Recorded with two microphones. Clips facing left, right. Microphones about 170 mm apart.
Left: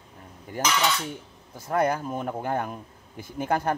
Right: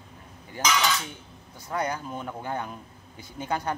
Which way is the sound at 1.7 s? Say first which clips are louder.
Left 5 dB; 50° left (ahead or behind).